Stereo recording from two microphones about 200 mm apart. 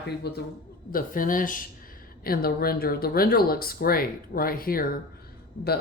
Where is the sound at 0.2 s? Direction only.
55° left (ahead or behind).